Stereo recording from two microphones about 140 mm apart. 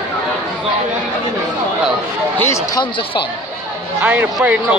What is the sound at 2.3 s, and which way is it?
Speech, 20° left (ahead or behind).